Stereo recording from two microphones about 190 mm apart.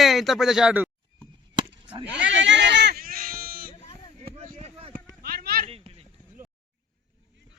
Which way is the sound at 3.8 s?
35° left (ahead or behind).